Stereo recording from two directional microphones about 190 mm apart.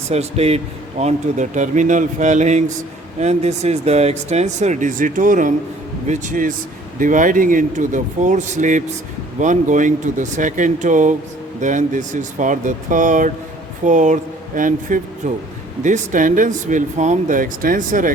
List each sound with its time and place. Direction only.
0.1 s speech: 35° right (ahead or behind)